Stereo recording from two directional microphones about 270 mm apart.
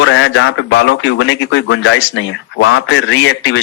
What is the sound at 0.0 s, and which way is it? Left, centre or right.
A man's voice, left.